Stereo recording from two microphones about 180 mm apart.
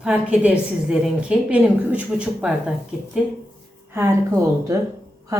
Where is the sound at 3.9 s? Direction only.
15° right (ahead or behind).